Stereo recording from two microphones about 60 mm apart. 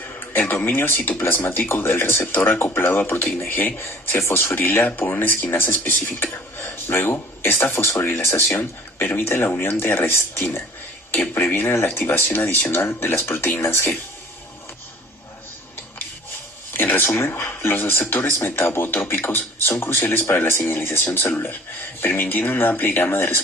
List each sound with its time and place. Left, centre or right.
0.3 s speech: left
16.7 s speech: left